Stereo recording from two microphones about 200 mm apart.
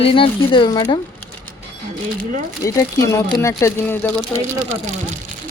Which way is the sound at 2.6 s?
15° left (ahead or behind).